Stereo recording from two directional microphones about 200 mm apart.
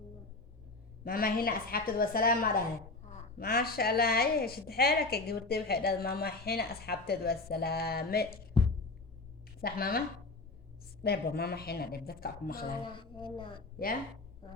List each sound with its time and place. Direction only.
1.0 s a woman's voice: 45° left (ahead or behind)
8.6 s a sound: 25° left (ahead or behind)
9.6 s speech: 50° left (ahead or behind)
11.0 s a woman's voice: 50° left (ahead or behind)
13.0 s a woman's voice: 25° left (ahead or behind)